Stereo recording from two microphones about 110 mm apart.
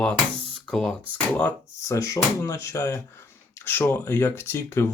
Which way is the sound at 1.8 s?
30° left (ahead or behind).